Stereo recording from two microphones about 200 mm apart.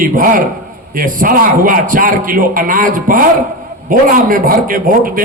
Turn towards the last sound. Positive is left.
turn(degrees=-45)  # may be behind; listen again after turning